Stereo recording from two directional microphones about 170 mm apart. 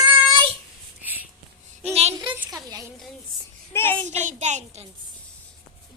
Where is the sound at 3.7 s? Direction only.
10° left (ahead or behind).